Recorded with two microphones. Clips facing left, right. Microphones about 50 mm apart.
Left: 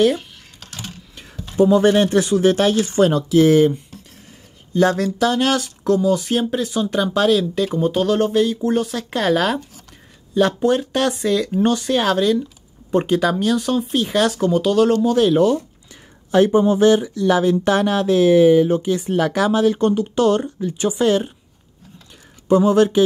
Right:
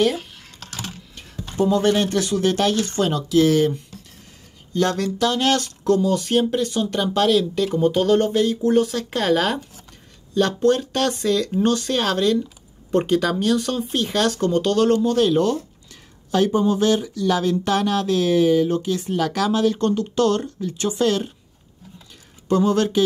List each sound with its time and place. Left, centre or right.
0.0 s computer keyboard: centre
1.6 s speech: centre
4.7 s speech: left; by 9.7 s centre
10.3 s speech: centre
22.5 s speech: centre